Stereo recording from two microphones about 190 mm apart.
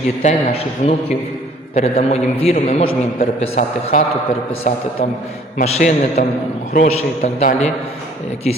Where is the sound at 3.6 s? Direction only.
45° left (ahead or behind).